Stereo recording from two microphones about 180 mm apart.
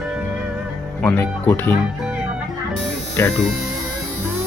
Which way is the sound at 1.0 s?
10° left (ahead or behind).